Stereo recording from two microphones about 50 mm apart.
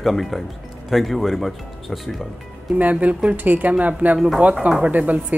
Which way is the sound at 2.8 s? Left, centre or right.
Right.